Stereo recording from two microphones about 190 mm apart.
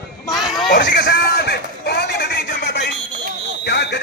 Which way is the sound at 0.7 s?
55° left (ahead or behind).